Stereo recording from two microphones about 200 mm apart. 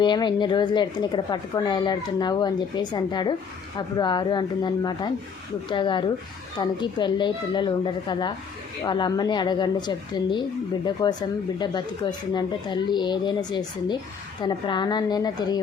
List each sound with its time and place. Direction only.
0.0 s a woman's voice: 20° left (ahead or behind)